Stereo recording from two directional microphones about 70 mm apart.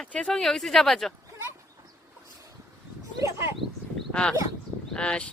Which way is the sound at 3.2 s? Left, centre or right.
Right.